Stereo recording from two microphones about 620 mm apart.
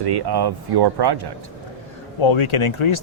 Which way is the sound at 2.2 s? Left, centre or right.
Left.